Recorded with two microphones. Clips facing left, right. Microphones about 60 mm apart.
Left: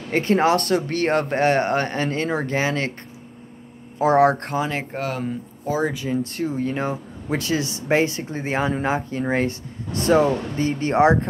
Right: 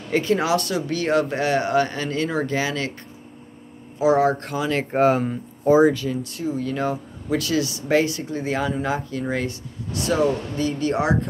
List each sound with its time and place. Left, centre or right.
0.1 s speech: left
4.0 s speech: left
4.9 s speech: right
6.1 s speech: left
6.6 s speech: left